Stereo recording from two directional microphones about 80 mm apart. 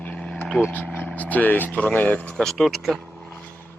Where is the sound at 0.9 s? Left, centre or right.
Left.